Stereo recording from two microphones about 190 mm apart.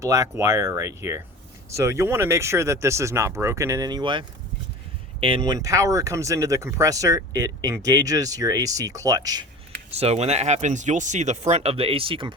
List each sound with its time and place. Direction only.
0.0 s speech: 15° right (ahead or behind)
9.9 s speech: 35° right (ahead or behind)